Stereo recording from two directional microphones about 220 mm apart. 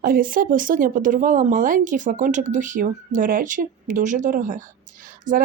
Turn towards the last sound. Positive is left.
turn(degrees=-35)  # may be behind; listen again after turning